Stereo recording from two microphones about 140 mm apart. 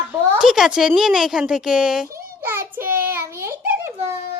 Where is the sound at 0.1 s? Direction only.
15° right (ahead or behind).